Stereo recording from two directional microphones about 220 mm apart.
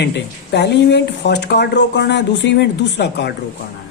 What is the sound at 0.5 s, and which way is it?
Speech, 50° left (ahead or behind).